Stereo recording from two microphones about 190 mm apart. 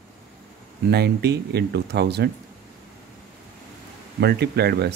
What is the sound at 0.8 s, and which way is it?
Speech, 60° right (ahead or behind).